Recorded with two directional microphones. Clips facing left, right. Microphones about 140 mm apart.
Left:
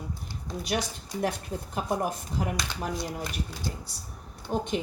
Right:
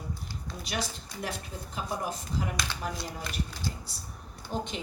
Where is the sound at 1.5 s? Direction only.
55° left (ahead or behind).